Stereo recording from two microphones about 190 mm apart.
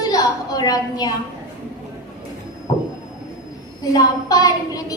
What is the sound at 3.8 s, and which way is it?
A woman's voice, 20° left (ahead or behind).